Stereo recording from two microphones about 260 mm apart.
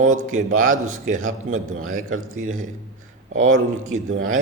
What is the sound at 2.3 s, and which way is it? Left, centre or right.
A man's voice, right.